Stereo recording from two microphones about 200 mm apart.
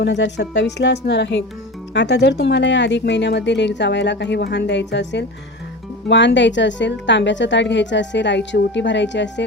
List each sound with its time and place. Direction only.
0.0 s a woman's voice: 60° left (ahead or behind)